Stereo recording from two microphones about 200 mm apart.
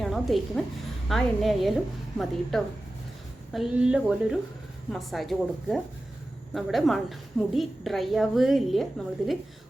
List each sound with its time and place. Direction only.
0.0 s a woman's voice: centre (ahead or behind)